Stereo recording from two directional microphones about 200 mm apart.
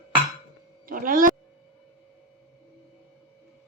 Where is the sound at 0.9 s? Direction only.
45° right (ahead or behind).